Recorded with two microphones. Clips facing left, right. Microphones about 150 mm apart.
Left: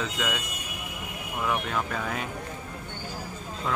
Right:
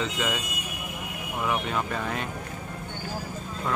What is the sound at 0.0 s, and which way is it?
Speech, centre (ahead or behind).